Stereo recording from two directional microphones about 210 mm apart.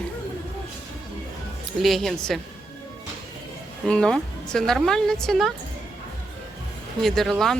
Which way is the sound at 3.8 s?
5° left (ahead or behind).